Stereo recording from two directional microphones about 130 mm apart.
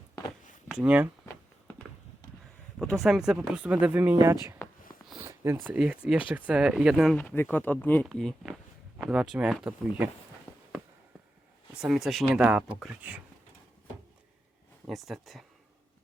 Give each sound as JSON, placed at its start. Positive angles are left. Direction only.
{"t": 0.7, "sound": "speech", "side_deg": -10}
{"t": 1.2, "sound": "a sound", "side_deg": 15}
{"t": 3.0, "sound": "speech", "side_deg": -5}
{"t": 5.1, "sound": "a sound", "side_deg": -25}
{"t": 5.6, "sound": "speech", "side_deg": -10}
{"t": 7.2, "sound": "speech", "side_deg": 15}
{"t": 8.0, "sound": "speech", "side_deg": 0}
{"t": 11.8, "sound": "speech", "side_deg": -5}
{"t": 14.8, "sound": "speech", "side_deg": 0}